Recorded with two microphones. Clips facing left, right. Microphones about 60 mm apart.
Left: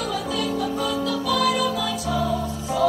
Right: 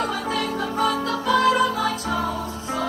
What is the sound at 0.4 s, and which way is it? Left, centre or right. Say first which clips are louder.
Music: right 2 dB; right.